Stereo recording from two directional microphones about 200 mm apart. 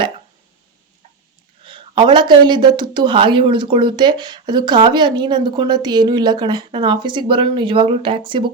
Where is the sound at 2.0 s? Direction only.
25° right (ahead or behind).